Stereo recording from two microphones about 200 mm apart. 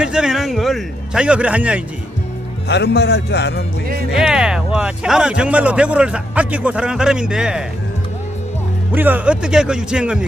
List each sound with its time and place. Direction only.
0.0 s speech: 5° right (ahead or behind)
2.6 s speech: 55° left (ahead or behind)
4.1 s speech: centre (ahead or behind)
8.9 s speech: 10° right (ahead or behind)